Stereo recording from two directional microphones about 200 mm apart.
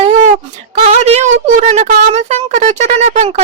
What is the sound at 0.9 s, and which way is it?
Speech, 35° right (ahead or behind).